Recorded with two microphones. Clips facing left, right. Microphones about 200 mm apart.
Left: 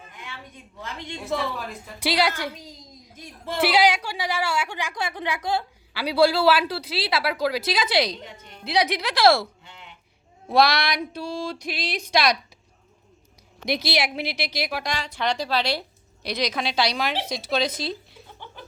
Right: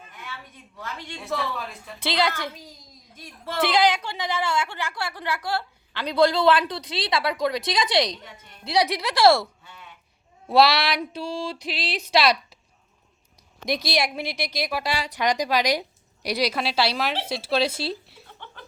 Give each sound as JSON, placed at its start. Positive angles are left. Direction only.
{"t": 0.8, "sound": "a woman's voice", "side_deg": 20}
{"t": 10.5, "sound": "speech", "side_deg": -5}
{"t": 13.7, "sound": "a woman's voice", "side_deg": 0}